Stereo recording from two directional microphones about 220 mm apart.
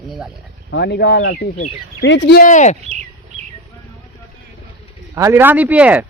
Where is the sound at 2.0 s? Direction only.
55° left (ahead or behind).